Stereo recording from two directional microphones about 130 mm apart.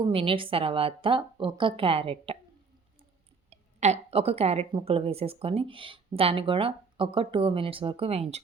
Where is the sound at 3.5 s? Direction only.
60° right (ahead or behind).